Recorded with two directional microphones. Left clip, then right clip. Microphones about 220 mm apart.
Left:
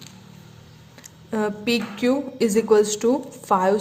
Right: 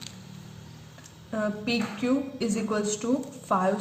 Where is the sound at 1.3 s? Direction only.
50° left (ahead or behind).